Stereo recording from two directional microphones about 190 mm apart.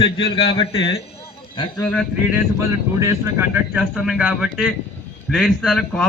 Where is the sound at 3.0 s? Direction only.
15° right (ahead or behind); by 6.0 s 5° left (ahead or behind).